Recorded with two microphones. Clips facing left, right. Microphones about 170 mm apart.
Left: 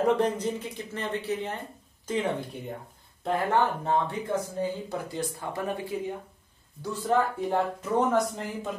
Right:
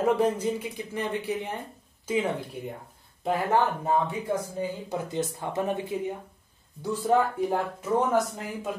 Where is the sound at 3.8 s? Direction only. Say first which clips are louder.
Right 1 dB; 10° right (ahead or behind).